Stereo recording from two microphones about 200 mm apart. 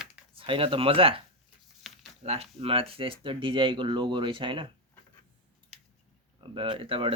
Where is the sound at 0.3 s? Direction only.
25° right (ahead or behind).